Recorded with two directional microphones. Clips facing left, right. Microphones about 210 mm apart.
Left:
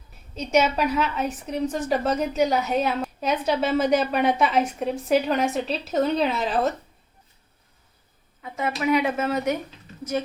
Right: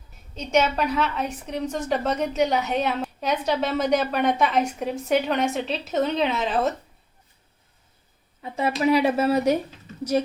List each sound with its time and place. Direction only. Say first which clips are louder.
0.3 s a woman's voice: left 1 dB; 10° left (ahead or behind)
8.4 s a sound: right 3 dB; 30° right (ahead or behind)
8.8 s speech: right 3 dB; 35° right (ahead or behind)